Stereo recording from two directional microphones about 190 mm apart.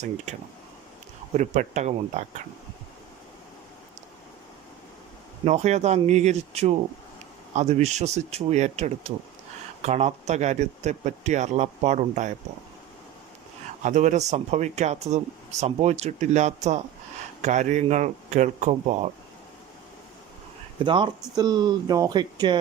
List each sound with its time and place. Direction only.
1.3 s speech: 40° right (ahead or behind)
5.5 s speech: 35° right (ahead or behind)
13.8 s speech: 40° right (ahead or behind)
20.8 s speech: 25° right (ahead or behind)